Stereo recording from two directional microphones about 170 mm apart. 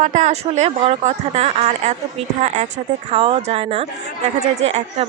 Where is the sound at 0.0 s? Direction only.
45° right (ahead or behind).